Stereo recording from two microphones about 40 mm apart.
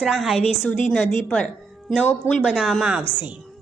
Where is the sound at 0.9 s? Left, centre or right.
Centre.